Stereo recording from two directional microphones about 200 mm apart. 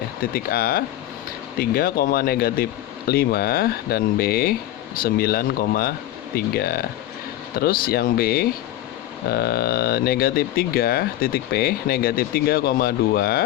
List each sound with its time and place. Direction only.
0.3 s speech: 50° left (ahead or behind)